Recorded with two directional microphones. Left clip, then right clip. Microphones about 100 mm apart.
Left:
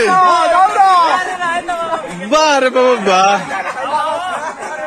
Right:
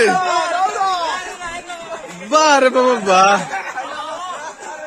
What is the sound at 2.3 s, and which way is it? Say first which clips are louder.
A man's voice: left 1 dB; 50° right (ahead or behind).